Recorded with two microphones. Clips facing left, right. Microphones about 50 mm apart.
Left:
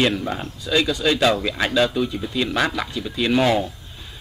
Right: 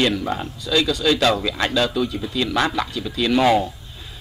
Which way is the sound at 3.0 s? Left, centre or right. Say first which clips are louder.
Even; centre.